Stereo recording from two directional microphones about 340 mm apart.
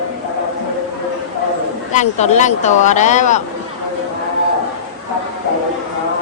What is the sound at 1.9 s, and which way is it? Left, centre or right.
Speech, centre.